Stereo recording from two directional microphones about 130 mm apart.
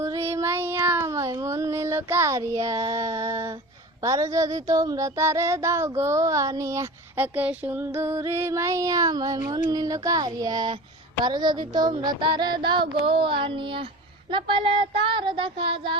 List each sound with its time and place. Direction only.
0.0 s child singing: 20° right (ahead or behind)
7.3 s child singing: 10° right (ahead or behind); by 16.0 s 40° right (ahead or behind)